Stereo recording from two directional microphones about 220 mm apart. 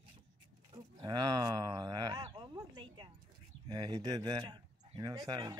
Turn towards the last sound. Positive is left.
turn(degrees=-20)  # may be behind; listen again after turning